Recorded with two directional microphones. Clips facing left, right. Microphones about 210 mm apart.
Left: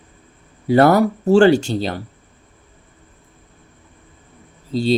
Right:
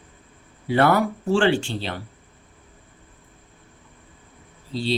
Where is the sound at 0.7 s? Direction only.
40° left (ahead or behind).